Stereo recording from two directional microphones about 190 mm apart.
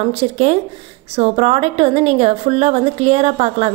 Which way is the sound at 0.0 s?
35° right (ahead or behind).